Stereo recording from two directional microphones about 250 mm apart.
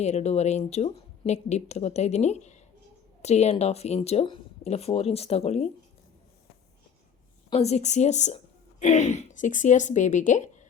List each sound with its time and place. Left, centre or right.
0.0 s speech: left
7.5 s speech: left